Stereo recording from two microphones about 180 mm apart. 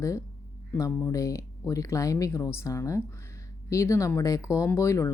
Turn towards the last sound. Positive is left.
turn(degrees=15)  # may be behind; listen again after turning